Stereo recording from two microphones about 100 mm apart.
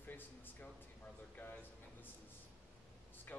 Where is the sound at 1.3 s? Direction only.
15° left (ahead or behind).